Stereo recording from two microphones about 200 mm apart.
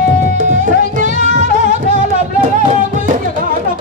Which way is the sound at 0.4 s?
40° right (ahead or behind).